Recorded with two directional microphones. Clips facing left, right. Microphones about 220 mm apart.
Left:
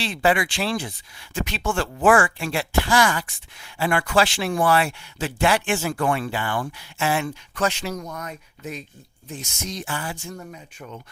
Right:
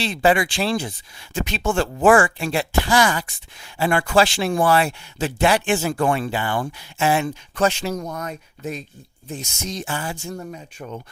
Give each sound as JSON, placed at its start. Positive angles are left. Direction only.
{"t": 0.0, "sound": "speech", "side_deg": -25}
{"t": 3.2, "sound": "speech", "side_deg": -35}
{"t": 5.4, "sound": "speech", "side_deg": -20}
{"t": 9.8, "sound": "speech", "side_deg": -25}
{"t": 10.5, "sound": "speech", "side_deg": -40}